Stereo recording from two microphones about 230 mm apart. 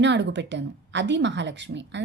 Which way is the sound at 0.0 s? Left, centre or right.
Right.